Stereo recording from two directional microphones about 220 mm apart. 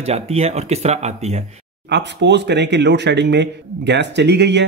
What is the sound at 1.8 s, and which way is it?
Speech, 50° right (ahead or behind).